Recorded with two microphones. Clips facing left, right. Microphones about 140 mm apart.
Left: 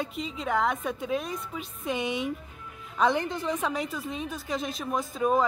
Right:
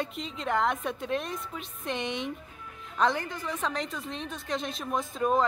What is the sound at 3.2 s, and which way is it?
Speech, 25° left (ahead or behind).